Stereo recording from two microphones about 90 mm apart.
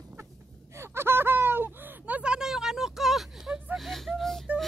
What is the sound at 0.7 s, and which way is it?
Whimper, 30° right (ahead or behind).